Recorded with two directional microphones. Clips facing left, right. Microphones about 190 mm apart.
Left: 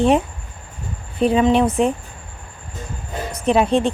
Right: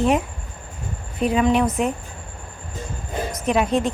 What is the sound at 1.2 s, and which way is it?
Speech, 25° left (ahead or behind).